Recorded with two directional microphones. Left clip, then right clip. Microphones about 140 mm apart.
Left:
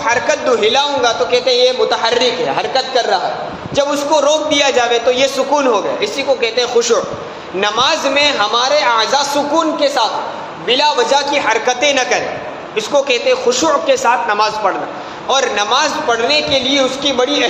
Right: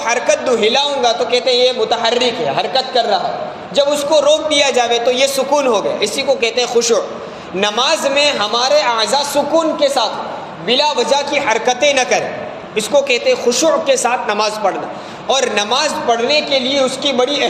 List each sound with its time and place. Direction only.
0.0 s a man's voice: 35° right (ahead or behind)